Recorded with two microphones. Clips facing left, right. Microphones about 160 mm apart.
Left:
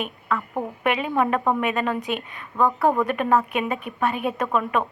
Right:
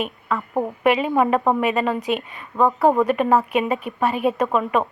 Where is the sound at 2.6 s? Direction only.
20° right (ahead or behind).